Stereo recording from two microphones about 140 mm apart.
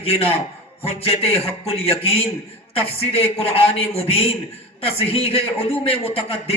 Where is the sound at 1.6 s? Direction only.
45° left (ahead or behind).